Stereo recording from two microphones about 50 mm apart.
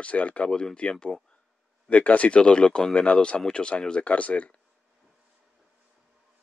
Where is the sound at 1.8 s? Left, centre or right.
Left.